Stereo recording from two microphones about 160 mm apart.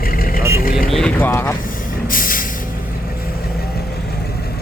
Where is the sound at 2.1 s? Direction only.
60° left (ahead or behind).